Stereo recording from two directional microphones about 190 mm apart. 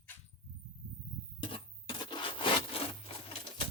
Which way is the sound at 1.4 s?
25° left (ahead or behind).